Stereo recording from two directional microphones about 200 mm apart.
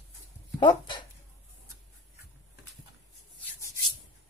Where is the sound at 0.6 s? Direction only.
20° left (ahead or behind).